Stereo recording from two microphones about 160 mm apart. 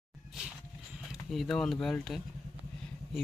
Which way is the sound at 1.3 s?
Centre (ahead or behind).